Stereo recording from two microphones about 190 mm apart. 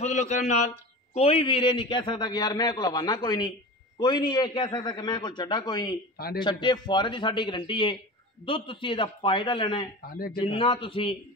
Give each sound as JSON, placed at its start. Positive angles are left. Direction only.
{"t": 0.0, "sound": "a man's voice", "side_deg": 40}
{"t": 6.1, "sound": "a man's voice", "side_deg": 50}
{"t": 6.4, "sound": "a man's voice", "side_deg": 25}